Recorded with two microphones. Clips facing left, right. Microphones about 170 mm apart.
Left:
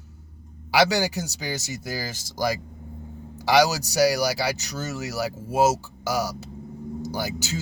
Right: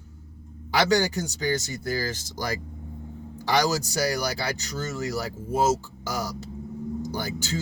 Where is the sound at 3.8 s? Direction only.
70° left (ahead or behind).